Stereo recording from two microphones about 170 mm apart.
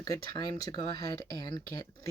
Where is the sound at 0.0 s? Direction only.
20° left (ahead or behind).